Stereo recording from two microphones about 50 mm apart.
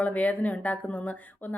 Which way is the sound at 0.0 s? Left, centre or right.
Left.